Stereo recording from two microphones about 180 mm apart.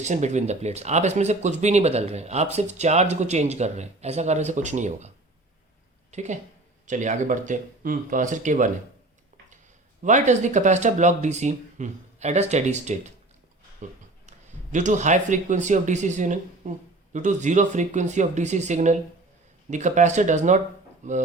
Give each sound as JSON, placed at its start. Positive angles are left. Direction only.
{"t": 0.0, "sound": "speech", "side_deg": -40}
{"t": 10.0, "sound": "a man's voice", "side_deg": -45}